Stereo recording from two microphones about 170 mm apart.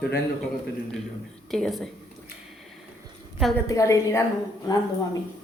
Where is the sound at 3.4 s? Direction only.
Centre (ahead or behind).